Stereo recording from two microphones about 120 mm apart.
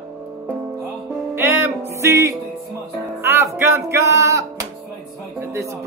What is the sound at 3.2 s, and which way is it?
Speech, 20° right (ahead or behind).